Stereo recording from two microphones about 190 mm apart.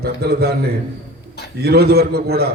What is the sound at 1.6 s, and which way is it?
Speech, 55° right (ahead or behind).